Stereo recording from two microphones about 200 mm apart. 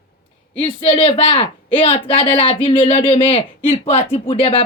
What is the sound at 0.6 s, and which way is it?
A woman's voice, 25° left (ahead or behind).